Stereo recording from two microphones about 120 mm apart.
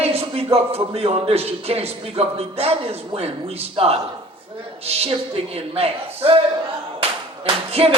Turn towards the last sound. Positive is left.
turn(degrees=-50)  # may be behind; listen again after turning